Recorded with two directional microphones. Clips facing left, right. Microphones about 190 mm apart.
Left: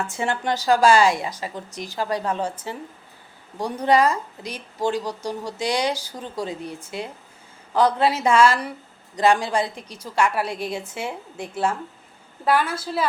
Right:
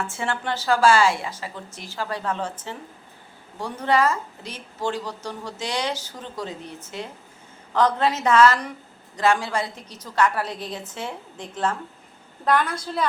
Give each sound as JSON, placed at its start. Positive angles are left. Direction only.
{"t": 0.1, "sound": "a woman's voice", "side_deg": 15}